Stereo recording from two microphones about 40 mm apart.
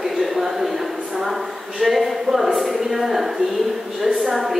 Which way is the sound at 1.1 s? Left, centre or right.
Centre.